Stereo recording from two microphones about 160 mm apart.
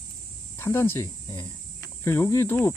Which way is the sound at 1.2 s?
25° left (ahead or behind).